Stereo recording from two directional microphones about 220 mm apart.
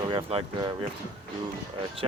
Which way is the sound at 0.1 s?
25° right (ahead or behind).